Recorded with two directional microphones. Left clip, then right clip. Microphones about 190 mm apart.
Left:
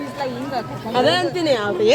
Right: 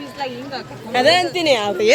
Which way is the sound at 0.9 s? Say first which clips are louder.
Right 3 dB; 30° right (ahead or behind).